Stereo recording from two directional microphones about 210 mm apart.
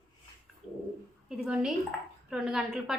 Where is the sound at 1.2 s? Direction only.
5° right (ahead or behind).